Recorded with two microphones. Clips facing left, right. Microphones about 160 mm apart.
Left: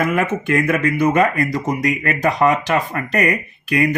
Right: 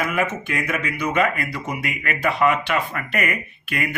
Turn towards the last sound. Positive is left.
turn(degrees=40)  # may be behind; listen again after turning